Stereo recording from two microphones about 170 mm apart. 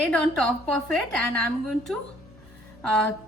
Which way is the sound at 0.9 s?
5° left (ahead or behind).